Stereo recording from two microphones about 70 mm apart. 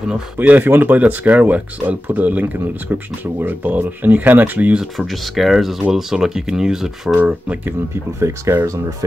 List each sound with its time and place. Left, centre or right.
0.4 s speech: right
4.9 s speech: centre
7.9 s speech: right